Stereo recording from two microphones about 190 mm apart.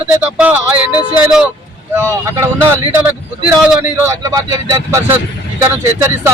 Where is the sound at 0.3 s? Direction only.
10° right (ahead or behind).